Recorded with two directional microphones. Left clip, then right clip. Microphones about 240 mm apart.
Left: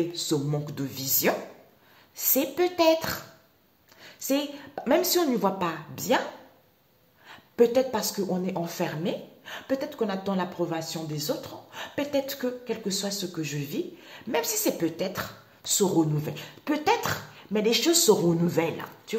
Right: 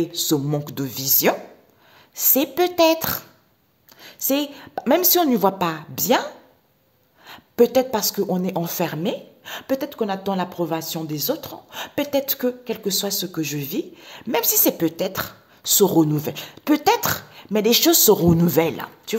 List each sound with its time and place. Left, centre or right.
0.1 s speech: right
7.2 s speech: right